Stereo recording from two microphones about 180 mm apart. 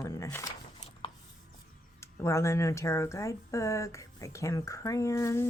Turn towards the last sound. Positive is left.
turn(degrees=15)  # may be behind; listen again after turning